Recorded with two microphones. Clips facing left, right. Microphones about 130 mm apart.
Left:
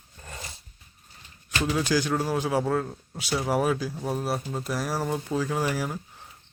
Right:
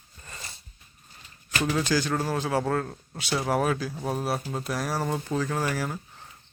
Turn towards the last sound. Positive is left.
turn(degrees=10)  # may be behind; listen again after turning